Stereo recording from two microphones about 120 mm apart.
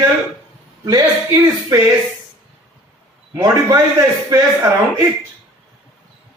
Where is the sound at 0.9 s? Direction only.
35° right (ahead or behind).